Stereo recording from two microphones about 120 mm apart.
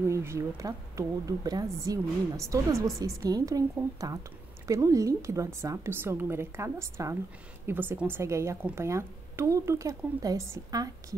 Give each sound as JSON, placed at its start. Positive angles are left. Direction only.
{"t": 0.1, "sound": "a woman's voice", "side_deg": -25}